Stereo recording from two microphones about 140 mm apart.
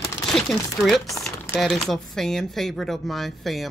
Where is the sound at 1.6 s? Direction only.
Centre (ahead or behind).